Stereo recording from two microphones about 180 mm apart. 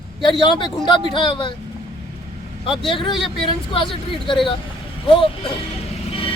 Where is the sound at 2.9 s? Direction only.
25° left (ahead or behind).